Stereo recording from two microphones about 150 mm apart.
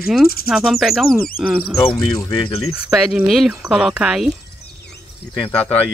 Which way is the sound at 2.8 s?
5° right (ahead or behind).